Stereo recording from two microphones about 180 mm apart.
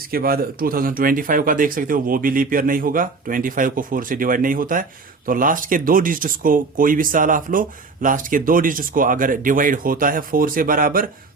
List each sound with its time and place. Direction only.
0.1 s speech: 55° right (ahead or behind)